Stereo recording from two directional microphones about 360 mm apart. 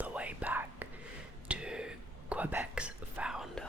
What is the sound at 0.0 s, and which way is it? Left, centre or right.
Whispering, centre.